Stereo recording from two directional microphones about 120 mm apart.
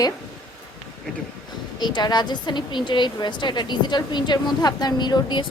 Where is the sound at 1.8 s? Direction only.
35° left (ahead or behind).